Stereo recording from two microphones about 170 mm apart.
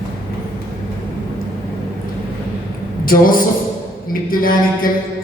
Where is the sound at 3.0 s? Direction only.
55° left (ahead or behind).